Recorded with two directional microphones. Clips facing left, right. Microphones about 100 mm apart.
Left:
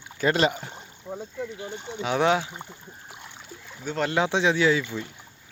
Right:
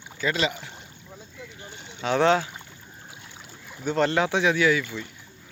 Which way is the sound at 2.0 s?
10° left (ahead or behind).